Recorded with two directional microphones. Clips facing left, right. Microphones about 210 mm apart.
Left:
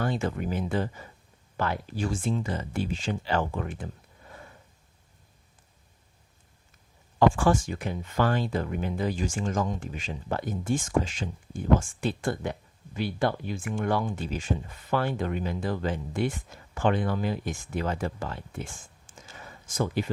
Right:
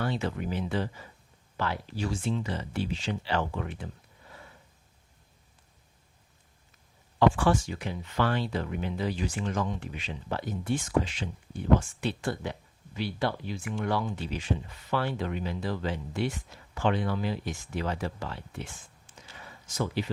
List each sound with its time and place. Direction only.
0.0 s speech: 45° left (ahead or behind)
7.2 s speech: 45° left (ahead or behind)